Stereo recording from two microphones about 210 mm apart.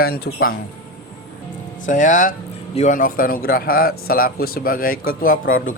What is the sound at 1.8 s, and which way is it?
Speech, 40° left (ahead or behind).